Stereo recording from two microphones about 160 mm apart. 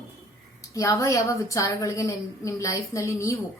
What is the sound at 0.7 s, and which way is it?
A woman's voice, 20° left (ahead or behind).